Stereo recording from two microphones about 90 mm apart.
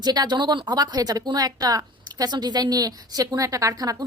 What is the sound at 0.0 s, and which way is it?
A woman's voice, 50° right (ahead or behind).